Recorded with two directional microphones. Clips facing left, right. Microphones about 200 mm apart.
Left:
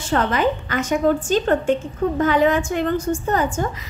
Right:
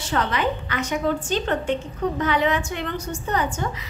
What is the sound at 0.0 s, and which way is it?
A woman's voice, 50° left (ahead or behind).